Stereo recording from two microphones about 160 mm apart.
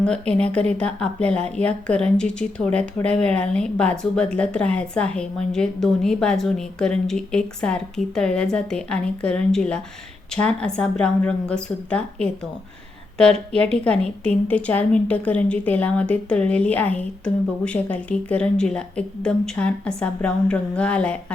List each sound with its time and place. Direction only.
0.0 s a woman's voice: 5° left (ahead or behind)
13.5 s a woman's voice: 5° left (ahead or behind)